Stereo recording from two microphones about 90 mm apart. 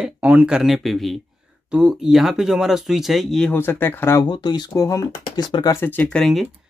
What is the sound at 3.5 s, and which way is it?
Speech, 25° left (ahead or behind).